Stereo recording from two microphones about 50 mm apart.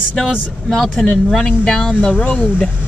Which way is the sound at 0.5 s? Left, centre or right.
Centre.